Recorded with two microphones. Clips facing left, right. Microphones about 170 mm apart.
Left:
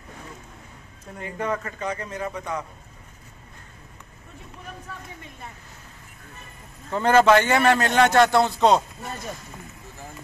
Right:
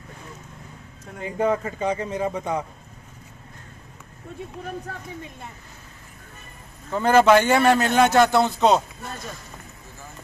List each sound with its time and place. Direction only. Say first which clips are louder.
1.2 s a man's voice: right 5 dB; 25° right (ahead or behind)
6.9 s a man's voice: right 1 dB; 10° right (ahead or behind)